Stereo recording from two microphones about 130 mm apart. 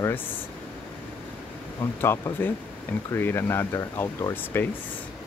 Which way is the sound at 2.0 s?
20° left (ahead or behind).